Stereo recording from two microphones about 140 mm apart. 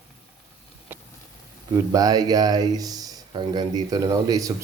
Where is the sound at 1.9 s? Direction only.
25° right (ahead or behind).